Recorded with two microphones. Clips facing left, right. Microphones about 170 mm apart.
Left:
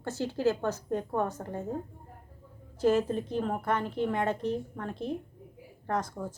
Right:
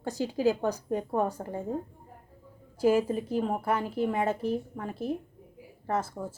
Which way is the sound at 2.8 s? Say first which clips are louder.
Right 1 dB; 10° right (ahead or behind).